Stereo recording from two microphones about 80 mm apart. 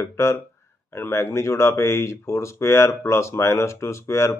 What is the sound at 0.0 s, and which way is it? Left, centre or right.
Speech, left.